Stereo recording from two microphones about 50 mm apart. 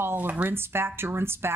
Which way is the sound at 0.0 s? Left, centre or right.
Right.